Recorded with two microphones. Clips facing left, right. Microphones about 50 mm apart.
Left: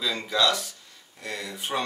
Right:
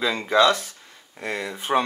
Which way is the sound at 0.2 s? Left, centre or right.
Right.